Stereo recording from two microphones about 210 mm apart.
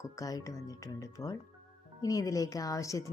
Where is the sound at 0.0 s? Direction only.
15° left (ahead or behind).